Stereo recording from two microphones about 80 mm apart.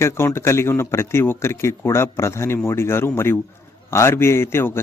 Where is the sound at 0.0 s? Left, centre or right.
Left.